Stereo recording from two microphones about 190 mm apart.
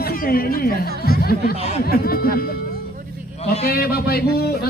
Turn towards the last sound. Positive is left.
turn(degrees=55)  # may be behind; listen again after turning